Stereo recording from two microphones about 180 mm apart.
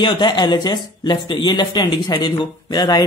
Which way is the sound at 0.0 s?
25° left (ahead or behind).